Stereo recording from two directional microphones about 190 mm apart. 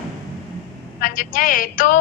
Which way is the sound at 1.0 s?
45° left (ahead or behind).